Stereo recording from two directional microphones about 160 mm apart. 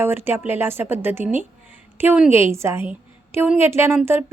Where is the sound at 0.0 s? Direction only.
15° right (ahead or behind).